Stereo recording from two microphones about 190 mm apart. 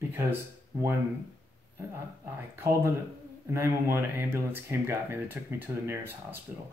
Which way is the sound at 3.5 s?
15° right (ahead or behind).